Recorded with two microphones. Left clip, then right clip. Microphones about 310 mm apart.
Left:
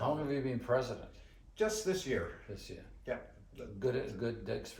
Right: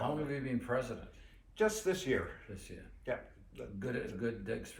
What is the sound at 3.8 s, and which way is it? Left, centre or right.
Speech, centre.